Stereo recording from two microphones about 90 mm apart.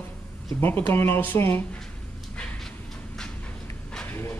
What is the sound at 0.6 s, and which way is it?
Speech, 25° left (ahead or behind).